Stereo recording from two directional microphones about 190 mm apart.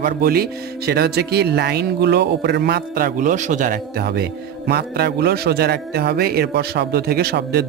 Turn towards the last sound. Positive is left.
turn(degrees=-55)  # may be behind; listen again after turning